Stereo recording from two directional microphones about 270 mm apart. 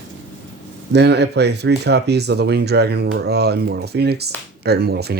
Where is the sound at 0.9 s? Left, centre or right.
Right.